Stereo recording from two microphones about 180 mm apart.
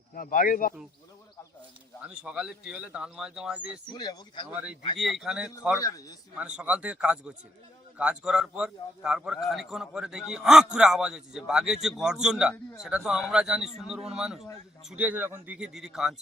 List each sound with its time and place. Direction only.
0.1 s speech: 50° left (ahead or behind)
2.0 s a man's voice: 5° right (ahead or behind)
3.9 s speech: 20° left (ahead or behind)
4.9 s a man's voice: centre (ahead or behind)
6.6 s a man's voice: 5° right (ahead or behind)